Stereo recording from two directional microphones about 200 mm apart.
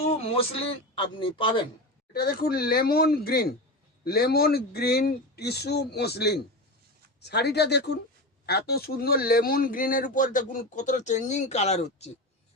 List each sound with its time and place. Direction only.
0.0 s speech: 30° left (ahead or behind)
2.1 s a man's voice: 50° left (ahead or behind); by 12.1 s 30° left (ahead or behind)